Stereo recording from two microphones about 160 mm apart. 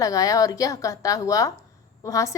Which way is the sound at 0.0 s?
20° left (ahead or behind).